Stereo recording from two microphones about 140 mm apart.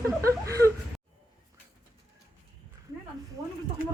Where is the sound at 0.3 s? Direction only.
20° right (ahead or behind).